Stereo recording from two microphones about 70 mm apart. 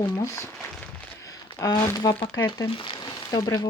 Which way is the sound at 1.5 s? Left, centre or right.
Left.